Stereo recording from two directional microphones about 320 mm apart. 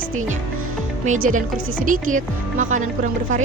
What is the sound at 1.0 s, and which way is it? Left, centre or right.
Speech, right.